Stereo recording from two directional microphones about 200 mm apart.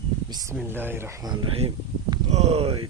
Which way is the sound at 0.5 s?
10° right (ahead or behind).